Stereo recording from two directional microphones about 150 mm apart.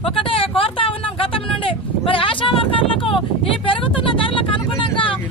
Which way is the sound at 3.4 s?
35° left (ahead or behind).